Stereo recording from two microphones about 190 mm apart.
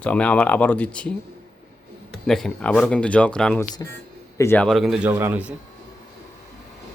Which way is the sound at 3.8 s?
20° left (ahead or behind).